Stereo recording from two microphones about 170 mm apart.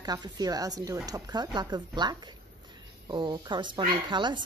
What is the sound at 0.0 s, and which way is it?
A woman's voice, 25° right (ahead or behind).